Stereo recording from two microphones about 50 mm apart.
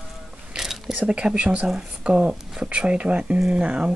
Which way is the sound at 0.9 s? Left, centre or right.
Right.